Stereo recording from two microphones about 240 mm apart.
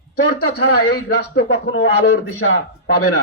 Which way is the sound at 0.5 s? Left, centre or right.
Left.